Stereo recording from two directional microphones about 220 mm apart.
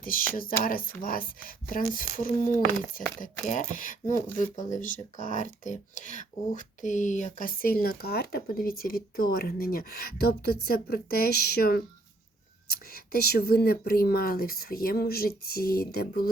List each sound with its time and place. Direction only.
0.0 s speech: 40° left (ahead or behind)
3.4 s speech: 40° left (ahead or behind)